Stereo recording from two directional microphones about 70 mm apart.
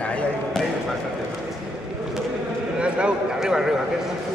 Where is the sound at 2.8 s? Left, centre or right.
Centre.